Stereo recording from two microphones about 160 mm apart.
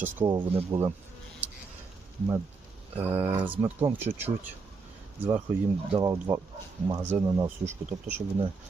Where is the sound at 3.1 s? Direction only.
10° right (ahead or behind).